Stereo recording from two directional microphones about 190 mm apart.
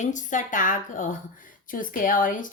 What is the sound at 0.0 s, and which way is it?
Speech, 40° left (ahead or behind).